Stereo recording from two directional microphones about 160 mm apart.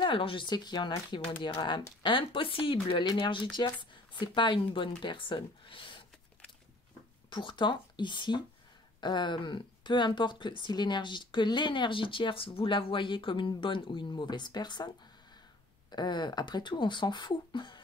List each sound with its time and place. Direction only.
0.0 s speech: 35° left (ahead or behind)
7.2 s speech: 30° left (ahead or behind)
15.9 s speech: 25° left (ahead or behind)